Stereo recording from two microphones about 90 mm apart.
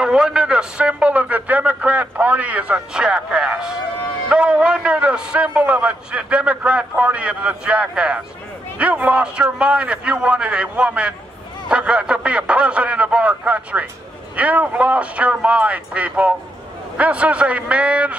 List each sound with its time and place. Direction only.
0.0 s a man's voice: 10° right (ahead or behind)